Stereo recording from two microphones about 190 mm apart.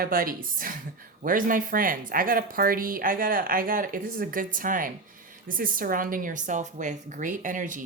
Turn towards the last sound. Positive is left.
turn(degrees=-45)  # may be behind; listen again after turning